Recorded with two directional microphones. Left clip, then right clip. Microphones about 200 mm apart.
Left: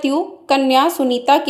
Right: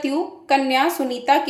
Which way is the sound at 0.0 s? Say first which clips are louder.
Left 4 dB; 30° left (ahead or behind).